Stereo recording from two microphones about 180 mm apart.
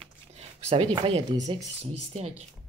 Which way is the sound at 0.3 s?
35° right (ahead or behind).